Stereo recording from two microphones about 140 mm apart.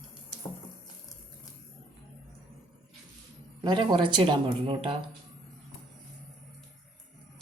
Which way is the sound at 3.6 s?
35° right (ahead or behind).